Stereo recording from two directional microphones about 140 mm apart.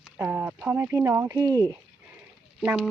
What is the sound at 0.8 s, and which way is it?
Speech, 20° right (ahead or behind).